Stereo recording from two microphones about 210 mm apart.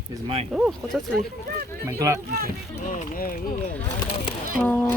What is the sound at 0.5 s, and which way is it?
Speech, 5° right (ahead or behind).